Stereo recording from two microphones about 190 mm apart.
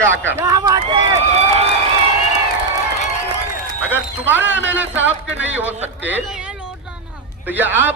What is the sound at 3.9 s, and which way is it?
A man's voice, 10° right (ahead or behind).